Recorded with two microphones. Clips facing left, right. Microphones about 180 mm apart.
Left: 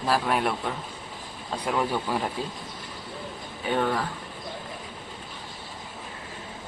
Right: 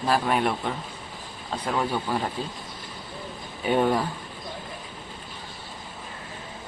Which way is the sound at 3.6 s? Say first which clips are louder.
Right 4 dB; 15° right (ahead or behind).